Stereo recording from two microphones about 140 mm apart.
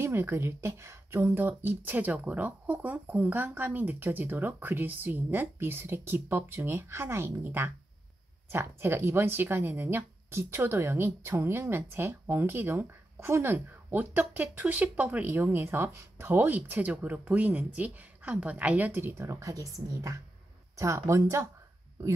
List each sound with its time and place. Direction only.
0.0 s speech: 15° right (ahead or behind)